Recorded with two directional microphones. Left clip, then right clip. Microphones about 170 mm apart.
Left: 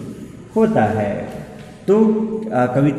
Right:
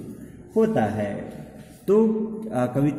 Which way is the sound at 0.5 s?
25° right (ahead or behind).